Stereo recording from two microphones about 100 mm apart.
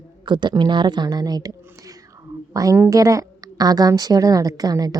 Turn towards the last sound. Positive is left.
turn(degrees=-40)  # may be behind; listen again after turning